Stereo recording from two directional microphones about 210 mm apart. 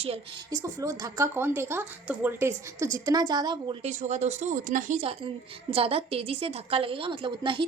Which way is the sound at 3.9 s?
35° right (ahead or behind).